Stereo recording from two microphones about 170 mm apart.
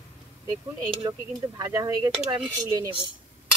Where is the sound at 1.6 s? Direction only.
20° right (ahead or behind).